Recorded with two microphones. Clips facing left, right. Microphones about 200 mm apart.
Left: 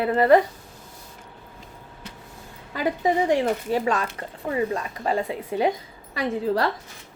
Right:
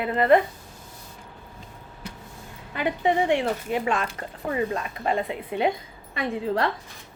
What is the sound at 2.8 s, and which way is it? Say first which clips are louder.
A woman's voice: left 1 dB; 35° left (ahead or behind).